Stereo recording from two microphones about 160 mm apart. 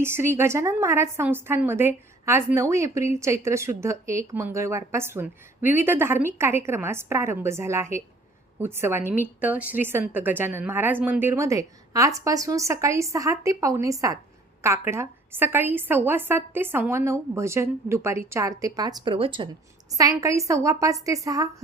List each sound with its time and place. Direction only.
0.0 s a woman's voice: 15° right (ahead or behind); by 19.5 s 35° right (ahead or behind)
19.9 s speech: 20° right (ahead or behind)